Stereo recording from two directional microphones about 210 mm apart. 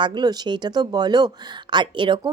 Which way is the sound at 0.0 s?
20° right (ahead or behind).